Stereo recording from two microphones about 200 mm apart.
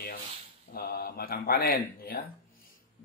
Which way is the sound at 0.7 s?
50° left (ahead or behind).